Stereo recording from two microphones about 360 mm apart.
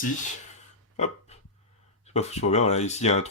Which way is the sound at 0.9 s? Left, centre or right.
Centre.